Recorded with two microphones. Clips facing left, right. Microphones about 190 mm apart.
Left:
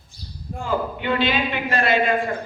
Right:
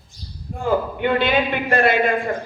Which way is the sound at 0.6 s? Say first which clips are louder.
Right 5 dB; 50° right (ahead or behind).